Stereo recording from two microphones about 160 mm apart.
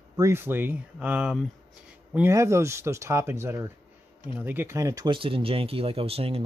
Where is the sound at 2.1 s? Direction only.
15° right (ahead or behind).